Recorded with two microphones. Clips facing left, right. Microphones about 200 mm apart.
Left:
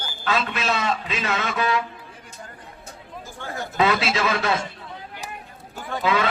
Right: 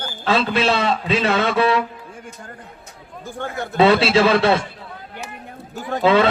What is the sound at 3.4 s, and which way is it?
Speech, 60° right (ahead or behind).